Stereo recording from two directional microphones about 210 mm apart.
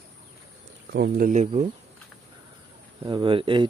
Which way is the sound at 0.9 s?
45° right (ahead or behind).